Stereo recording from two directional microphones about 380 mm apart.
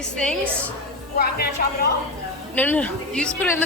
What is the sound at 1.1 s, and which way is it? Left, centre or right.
Speech, left.